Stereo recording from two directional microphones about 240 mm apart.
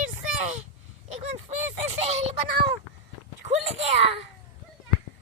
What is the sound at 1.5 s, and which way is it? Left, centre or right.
Speech, right.